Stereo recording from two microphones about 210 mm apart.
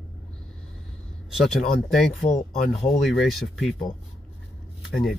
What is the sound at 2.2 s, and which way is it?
Speech, 40° left (ahead or behind).